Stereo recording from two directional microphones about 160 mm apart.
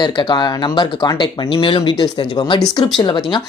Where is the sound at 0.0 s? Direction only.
30° left (ahead or behind).